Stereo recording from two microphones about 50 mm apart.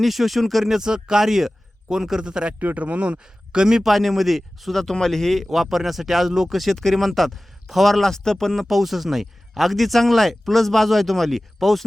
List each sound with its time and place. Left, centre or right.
0.0 s speech: centre
2.6 s speech: right; by 3.8 s centre
3.8 s speech: centre
5.5 s speech: centre
8.6 s speech: centre